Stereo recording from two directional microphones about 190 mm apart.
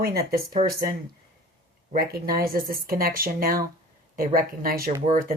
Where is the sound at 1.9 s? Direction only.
50° right (ahead or behind).